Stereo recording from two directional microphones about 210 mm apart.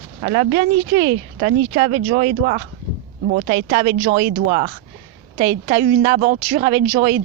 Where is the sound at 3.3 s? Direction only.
65° right (ahead or behind).